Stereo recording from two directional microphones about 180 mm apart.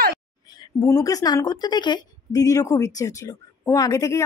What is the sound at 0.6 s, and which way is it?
A woman's voice, 20° left (ahead or behind).